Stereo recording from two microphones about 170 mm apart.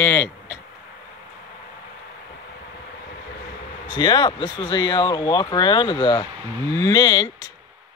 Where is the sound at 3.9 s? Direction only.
25° left (ahead or behind).